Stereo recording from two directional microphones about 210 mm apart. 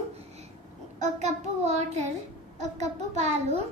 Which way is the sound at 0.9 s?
35° right (ahead or behind).